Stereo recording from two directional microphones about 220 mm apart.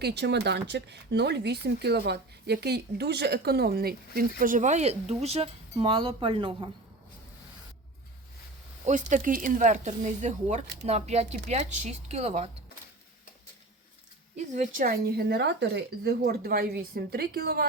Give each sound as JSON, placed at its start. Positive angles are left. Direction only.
{"t": 0.0, "sound": "speech", "side_deg": -50}
{"t": 8.8, "sound": "speech", "side_deg": -35}
{"t": 14.3, "sound": "speech", "side_deg": -30}
{"t": 14.8, "sound": "speech", "side_deg": -45}